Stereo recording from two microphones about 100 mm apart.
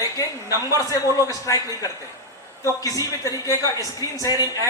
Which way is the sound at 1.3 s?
35° left (ahead or behind).